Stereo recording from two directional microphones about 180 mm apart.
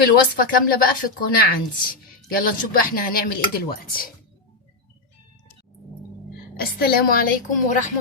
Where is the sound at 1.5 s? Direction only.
55° left (ahead or behind).